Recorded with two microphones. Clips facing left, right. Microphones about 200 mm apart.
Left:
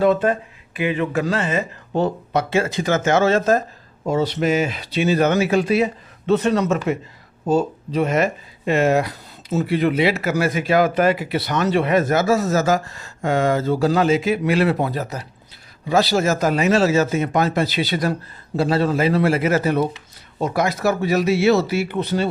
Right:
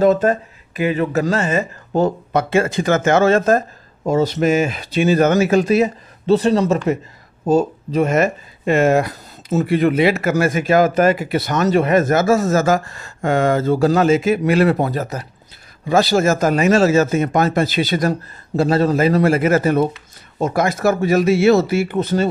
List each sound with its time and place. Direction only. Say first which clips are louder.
0.0 s speech: right 3 dB; 40° right (ahead or behind)
7.4 s speech: right 3 dB; 45° right (ahead or behind)